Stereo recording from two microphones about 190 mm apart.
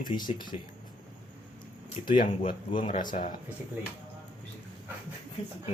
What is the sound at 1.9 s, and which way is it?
Speech, 45° left (ahead or behind).